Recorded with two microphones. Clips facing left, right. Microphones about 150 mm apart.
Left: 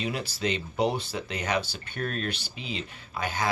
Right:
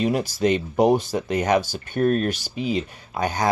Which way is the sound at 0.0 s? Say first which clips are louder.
Right 9 dB; 45° right (ahead or behind).